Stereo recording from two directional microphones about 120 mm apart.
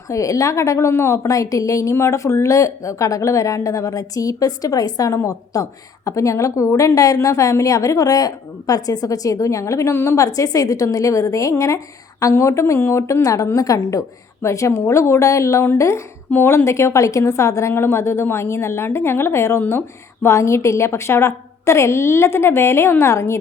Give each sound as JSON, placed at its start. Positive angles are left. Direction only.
{"t": 0.1, "sound": "a woman's voice", "side_deg": 25}